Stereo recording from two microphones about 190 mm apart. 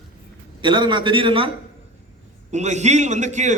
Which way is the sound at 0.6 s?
25° right (ahead or behind).